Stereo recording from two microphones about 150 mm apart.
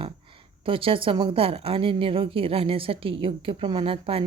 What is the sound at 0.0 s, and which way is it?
A woman's voice, 35° right (ahead or behind).